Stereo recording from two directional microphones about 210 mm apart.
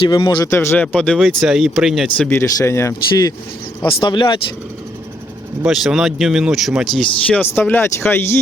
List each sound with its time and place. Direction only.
0.1 s speech: 20° left (ahead or behind)
5.6 s speech: centre (ahead or behind)